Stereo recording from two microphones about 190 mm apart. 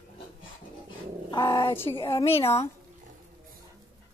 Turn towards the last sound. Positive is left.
turn(degrees=35)  # may be behind; listen again after turning